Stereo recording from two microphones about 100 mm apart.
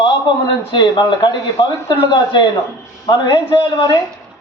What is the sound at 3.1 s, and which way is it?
Speech, 45° left (ahead or behind).